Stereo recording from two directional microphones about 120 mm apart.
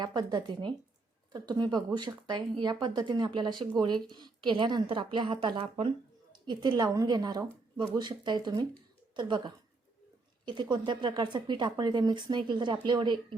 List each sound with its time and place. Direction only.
0.0 s a woman's voice: 35° right (ahead or behind)